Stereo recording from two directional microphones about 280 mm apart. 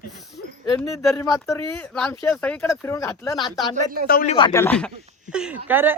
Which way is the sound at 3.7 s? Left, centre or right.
Right.